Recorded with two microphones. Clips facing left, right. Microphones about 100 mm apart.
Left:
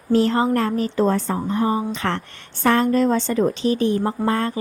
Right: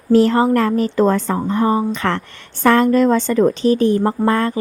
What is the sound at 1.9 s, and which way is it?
A woman's voice, 50° right (ahead or behind).